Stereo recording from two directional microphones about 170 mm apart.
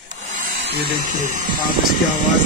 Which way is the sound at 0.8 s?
50° right (ahead or behind).